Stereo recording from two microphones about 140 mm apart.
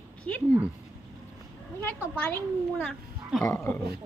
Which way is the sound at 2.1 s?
10° left (ahead or behind).